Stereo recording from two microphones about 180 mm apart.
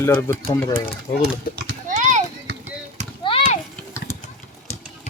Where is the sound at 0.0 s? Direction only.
15° left (ahead or behind).